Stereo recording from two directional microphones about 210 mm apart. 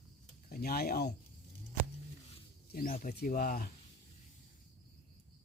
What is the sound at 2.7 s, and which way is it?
Speech, 40° left (ahead or behind).